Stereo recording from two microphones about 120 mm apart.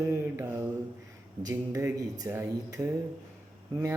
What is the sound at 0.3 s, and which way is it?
Mantra, 20° right (ahead or behind).